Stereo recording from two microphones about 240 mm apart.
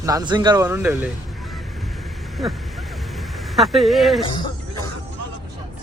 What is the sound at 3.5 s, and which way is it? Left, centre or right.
Speech, centre.